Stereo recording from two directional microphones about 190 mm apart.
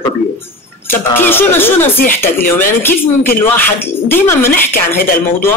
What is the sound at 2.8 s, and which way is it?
Speech, 10° left (ahead or behind).